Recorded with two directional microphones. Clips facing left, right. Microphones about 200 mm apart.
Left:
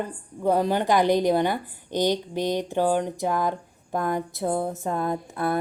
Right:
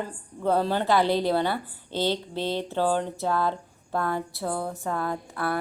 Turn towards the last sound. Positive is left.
turn(degrees=20)  # may be behind; listen again after turning